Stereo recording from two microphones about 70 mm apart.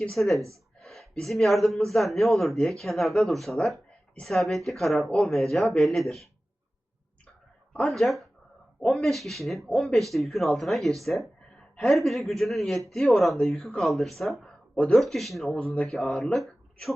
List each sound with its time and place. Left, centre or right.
0.0 s speech: centre
0.8 s a sound: centre
1.2 s speech: centre
7.7 s speech: centre